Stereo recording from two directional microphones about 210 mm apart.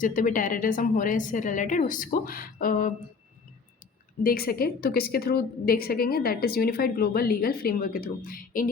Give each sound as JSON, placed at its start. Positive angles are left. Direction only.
{"t": 0.0, "sound": "a woman's voice", "side_deg": 40}
{"t": 4.2, "sound": "a woman's voice", "side_deg": 45}